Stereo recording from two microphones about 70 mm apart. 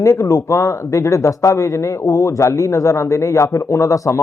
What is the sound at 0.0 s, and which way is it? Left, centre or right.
Speech, left.